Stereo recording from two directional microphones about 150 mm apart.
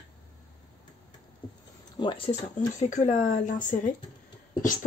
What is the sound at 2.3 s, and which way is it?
Speech, 50° left (ahead or behind).